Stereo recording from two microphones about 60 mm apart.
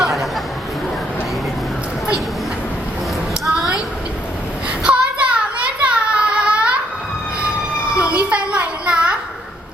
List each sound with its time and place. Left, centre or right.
0.0 s chatter: centre
4.8 s child singing: centre
8.1 s a sound: centre